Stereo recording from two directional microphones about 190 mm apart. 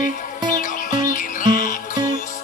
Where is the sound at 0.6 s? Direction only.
45° left (ahead or behind).